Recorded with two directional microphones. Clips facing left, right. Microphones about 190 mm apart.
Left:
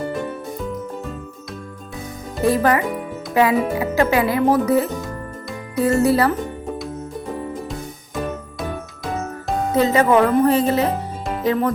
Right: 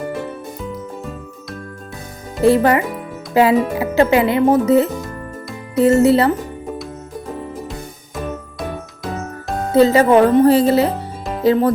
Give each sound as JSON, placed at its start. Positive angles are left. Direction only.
{"t": 2.4, "sound": "speech", "side_deg": -30}
{"t": 4.9, "sound": "music", "side_deg": 0}
{"t": 5.7, "sound": "speech", "side_deg": -25}
{"t": 9.7, "sound": "speech", "side_deg": -30}